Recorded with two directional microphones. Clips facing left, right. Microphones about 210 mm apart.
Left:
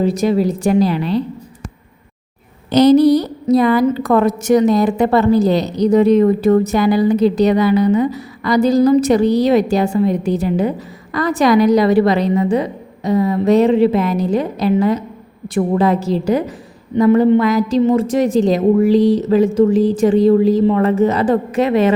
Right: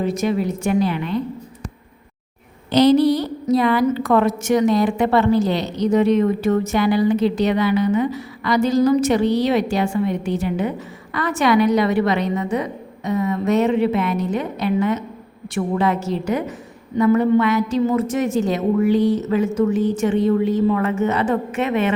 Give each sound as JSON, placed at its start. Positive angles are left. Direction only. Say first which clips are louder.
{"t": 0.0, "sound": "a woman's voice", "louder": "left 5 dB", "side_deg": 35}
{"t": 2.7, "sound": "a woman's voice", "louder": "left 4 dB", "side_deg": 45}
{"t": 18.9, "sound": "speech", "louder": "left 5 dB", "side_deg": 90}
{"t": 19.2, "sound": "a woman's voice", "louder": "left 6 dB", "side_deg": 35}
{"t": 19.7, "sound": "speech", "louder": "left 5 dB", "side_deg": 90}
{"t": 20.0, "sound": "a woman's voice", "louder": "left 6 dB", "side_deg": 35}